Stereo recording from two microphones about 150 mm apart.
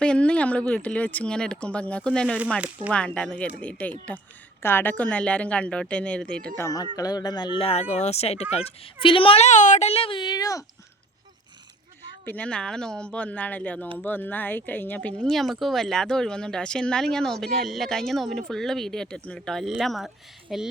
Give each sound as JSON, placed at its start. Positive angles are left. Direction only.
{"t": 0.0, "sound": "speech", "side_deg": 5}
{"t": 2.2, "sound": "speech", "side_deg": -5}
{"t": 2.9, "sound": "speech", "side_deg": 5}
{"t": 6.6, "sound": "speech", "side_deg": 20}
{"t": 12.2, "sound": "speech", "side_deg": 10}